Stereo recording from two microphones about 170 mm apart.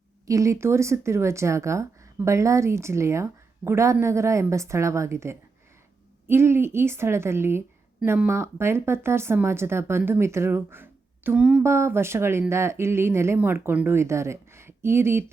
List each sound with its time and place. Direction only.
0.3 s speech: 20° right (ahead or behind)